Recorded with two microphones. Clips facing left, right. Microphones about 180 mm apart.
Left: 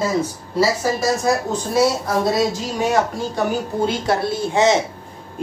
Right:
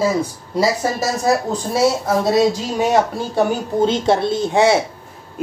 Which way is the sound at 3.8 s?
25° right (ahead or behind).